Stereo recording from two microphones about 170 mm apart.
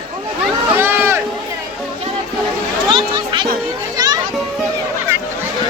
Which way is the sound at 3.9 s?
20° right (ahead or behind).